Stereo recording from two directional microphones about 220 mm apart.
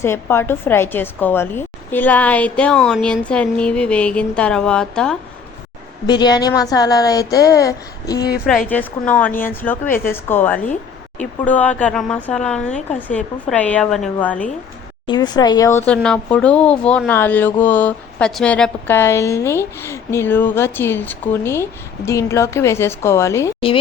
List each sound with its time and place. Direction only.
0.0 s a woman's voice: 10° left (ahead or behind)
6.1 s speech: 20° left (ahead or behind)
8.4 s speech: 5° left (ahead or behind)
15.0 s speech: 20° left (ahead or behind)